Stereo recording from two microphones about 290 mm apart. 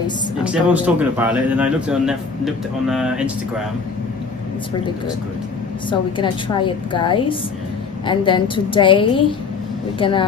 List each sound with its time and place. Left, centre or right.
0.4 s a man's voice: centre
5.9 s a woman's voice: centre